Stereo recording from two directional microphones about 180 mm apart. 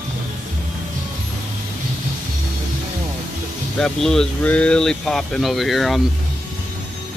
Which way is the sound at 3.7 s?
5° left (ahead or behind).